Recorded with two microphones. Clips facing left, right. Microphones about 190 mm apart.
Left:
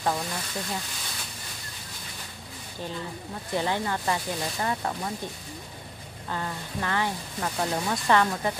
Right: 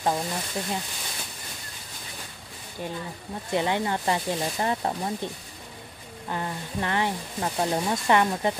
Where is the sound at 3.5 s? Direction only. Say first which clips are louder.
Right 2 dB; 20° right (ahead or behind).